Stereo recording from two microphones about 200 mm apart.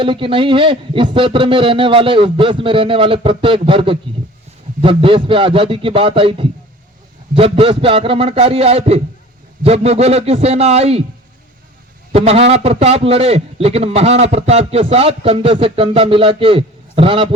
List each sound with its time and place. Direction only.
0.0 s a man's voice: 25° right (ahead or behind)
12.1 s a man's voice: 30° right (ahead or behind)